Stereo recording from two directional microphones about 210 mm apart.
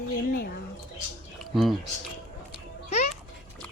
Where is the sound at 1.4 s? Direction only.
Centre (ahead or behind).